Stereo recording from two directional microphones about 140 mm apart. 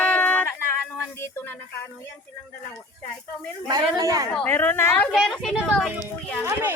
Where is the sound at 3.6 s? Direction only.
25° right (ahead or behind).